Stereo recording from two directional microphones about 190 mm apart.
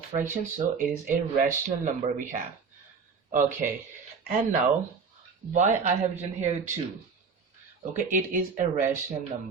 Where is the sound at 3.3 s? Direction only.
45° right (ahead or behind).